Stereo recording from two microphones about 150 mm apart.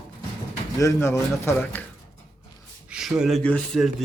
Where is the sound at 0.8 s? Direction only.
20° left (ahead or behind).